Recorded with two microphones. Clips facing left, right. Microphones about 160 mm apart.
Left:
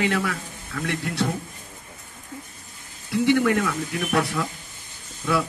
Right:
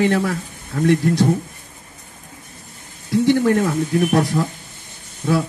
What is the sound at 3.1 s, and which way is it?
Speech, 40° right (ahead or behind).